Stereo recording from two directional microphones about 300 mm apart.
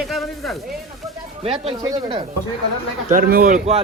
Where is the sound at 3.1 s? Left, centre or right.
Right.